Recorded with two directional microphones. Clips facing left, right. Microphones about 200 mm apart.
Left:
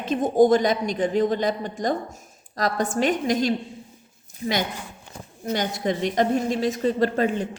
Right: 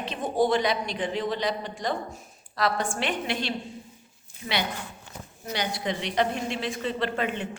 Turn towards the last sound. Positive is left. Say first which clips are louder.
# left 7 dB
turn(degrees=40)  # may be behind; listen again after turning